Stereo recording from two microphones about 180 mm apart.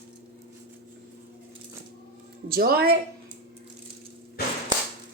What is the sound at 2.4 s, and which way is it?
Speech, 55° right (ahead or behind).